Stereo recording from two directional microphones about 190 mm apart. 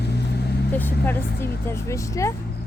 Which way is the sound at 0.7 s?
10° left (ahead or behind).